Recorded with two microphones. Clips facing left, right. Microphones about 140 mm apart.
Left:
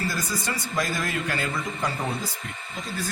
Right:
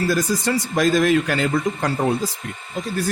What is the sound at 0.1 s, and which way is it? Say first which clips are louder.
A man's voice: right 10 dB; 90° right.